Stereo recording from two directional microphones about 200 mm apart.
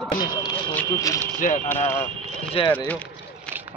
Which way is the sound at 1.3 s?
40° left (ahead or behind).